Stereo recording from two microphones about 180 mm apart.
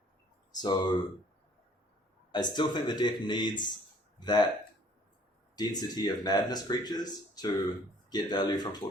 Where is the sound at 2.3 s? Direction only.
25° left (ahead or behind).